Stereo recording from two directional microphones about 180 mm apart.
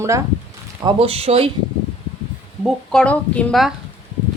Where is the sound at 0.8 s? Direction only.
35° right (ahead or behind).